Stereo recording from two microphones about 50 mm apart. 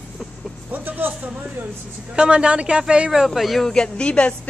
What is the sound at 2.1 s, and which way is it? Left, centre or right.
A man's voice, centre.